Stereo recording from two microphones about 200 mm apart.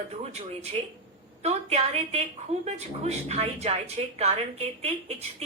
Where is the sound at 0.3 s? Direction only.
35° right (ahead or behind).